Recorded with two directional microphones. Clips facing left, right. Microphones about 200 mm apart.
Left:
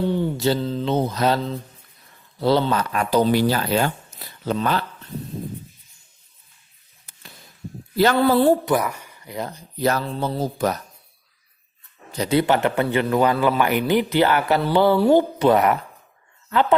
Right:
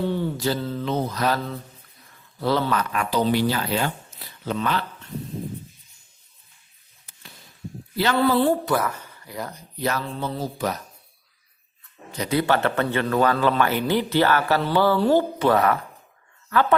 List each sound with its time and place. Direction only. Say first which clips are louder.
0.0 s mantra: left 3 dB; 15° left (ahead or behind)
2.4 s speech: left 3 dB; 30° left (ahead or behind)
7.9 s a woman's voice: left 3 dB; 45° left (ahead or behind)
8.6 s speech: left 2 dB; 15° left (ahead or behind)
9.8 s speech: left 4 dB; 40° left (ahead or behind)
12.1 s a man's voice: left 3 dB; 30° left (ahead or behind)